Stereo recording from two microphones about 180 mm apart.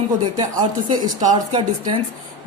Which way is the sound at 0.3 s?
20° right (ahead or behind).